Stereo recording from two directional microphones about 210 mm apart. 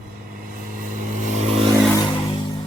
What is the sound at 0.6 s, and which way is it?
Vehicle, 40° right (ahead or behind).